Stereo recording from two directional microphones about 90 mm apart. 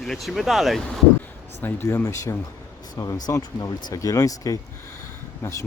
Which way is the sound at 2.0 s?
35° left (ahead or behind).